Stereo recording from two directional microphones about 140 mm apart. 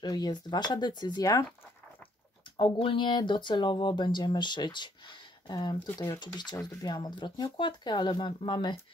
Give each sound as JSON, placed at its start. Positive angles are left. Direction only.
{"t": 0.0, "sound": "speech", "side_deg": 30}
{"t": 2.5, "sound": "speech", "side_deg": 40}